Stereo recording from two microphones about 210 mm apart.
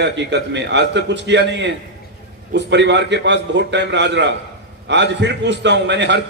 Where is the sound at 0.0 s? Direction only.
55° right (ahead or behind).